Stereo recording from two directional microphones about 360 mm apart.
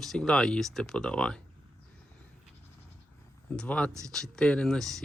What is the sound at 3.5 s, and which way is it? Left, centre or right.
Speech, centre.